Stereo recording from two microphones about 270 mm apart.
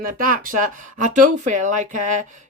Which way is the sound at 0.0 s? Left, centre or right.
Right.